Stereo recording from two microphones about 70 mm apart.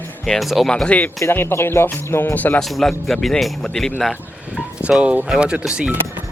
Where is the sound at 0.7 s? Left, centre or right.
Centre.